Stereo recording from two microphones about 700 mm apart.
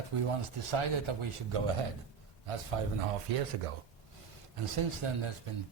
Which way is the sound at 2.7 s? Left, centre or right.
Right.